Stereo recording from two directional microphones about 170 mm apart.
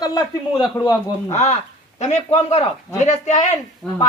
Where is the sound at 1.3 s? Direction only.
40° left (ahead or behind).